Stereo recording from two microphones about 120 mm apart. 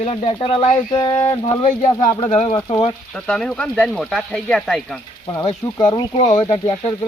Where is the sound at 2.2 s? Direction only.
60° left (ahead or behind).